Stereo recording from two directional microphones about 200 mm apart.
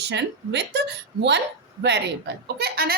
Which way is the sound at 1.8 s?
60° right (ahead or behind).